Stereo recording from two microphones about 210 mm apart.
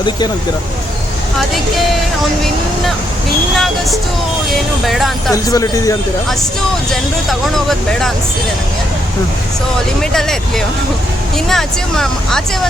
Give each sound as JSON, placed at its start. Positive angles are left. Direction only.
{"t": 4.9, "sound": "speech", "side_deg": 0}
{"t": 5.3, "sound": "speech", "side_deg": 15}
{"t": 6.9, "sound": "speech", "side_deg": 0}
{"t": 10.0, "sound": "speech", "side_deg": 0}
{"t": 11.4, "sound": "speech", "side_deg": 0}